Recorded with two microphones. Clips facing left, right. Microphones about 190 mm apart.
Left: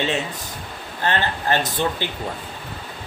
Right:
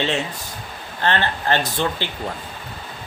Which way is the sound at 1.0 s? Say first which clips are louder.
Right 1 dB; 15° left (ahead or behind).